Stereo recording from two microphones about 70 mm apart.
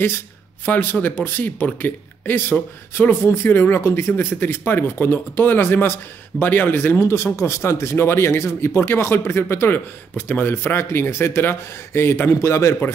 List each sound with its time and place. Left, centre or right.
0.7 s speech: left